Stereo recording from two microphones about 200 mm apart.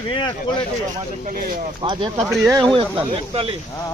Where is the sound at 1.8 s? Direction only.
25° right (ahead or behind).